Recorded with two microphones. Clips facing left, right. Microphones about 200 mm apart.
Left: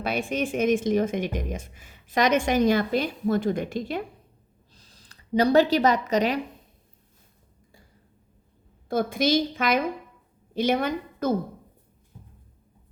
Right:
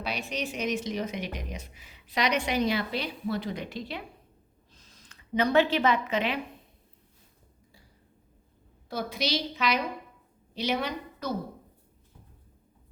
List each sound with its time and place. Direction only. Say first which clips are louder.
0.0 s a woman's voice: left 7 dB; 50° left (ahead or behind)
4.7 s a woman's voice: left 1 dB; 35° left (ahead or behind)
8.9 s a woman's voice: left 8 dB; 50° left (ahead or behind)